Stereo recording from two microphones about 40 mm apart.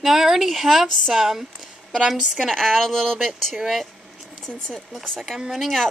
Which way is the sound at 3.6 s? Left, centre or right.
Centre.